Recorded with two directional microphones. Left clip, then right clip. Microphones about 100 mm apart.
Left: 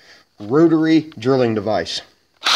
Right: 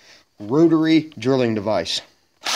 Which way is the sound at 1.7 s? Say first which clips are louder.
Left 1 dB; 50° right (ahead or behind).